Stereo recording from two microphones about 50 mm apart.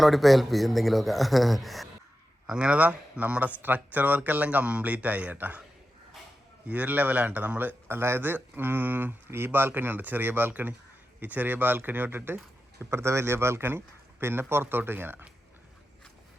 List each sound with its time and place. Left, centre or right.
0.0 s speech: centre
2.5 s a man's voice: right
6.7 s a man's voice: right
12.8 s a man's voice: right